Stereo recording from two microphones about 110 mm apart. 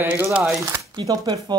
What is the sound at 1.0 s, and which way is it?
Speech, 35° right (ahead or behind).